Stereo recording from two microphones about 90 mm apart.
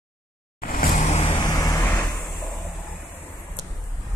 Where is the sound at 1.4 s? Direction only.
40° left (ahead or behind).